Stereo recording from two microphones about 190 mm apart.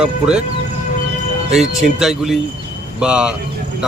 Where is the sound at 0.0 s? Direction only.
5° right (ahead or behind).